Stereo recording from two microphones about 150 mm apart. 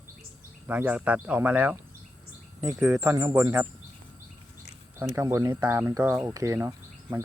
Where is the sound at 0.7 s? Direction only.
10° right (ahead or behind).